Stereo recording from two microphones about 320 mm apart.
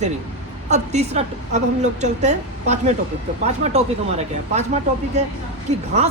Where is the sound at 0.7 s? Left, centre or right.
Right.